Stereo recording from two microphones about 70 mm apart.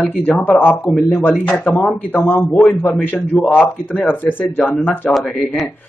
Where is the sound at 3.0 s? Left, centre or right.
Left.